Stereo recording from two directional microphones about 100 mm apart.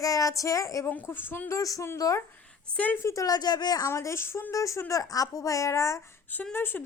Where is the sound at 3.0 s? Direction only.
30° left (ahead or behind).